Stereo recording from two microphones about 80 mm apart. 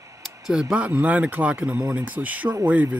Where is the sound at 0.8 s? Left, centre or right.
Centre.